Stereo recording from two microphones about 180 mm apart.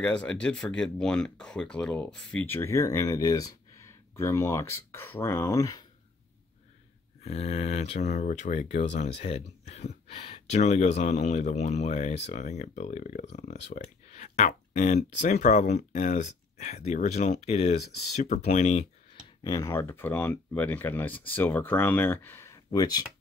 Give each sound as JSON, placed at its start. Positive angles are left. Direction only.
{"t": 0.0, "sound": "speech", "side_deg": 5}
{"t": 7.2, "sound": "speech", "side_deg": 35}
{"t": 17.7, "sound": "speech", "side_deg": 65}
{"t": 18.1, "sound": "speech", "side_deg": 40}
{"t": 19.4, "sound": "speech", "side_deg": 20}